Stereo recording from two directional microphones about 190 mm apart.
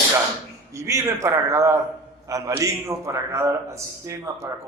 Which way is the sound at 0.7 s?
15° right (ahead or behind).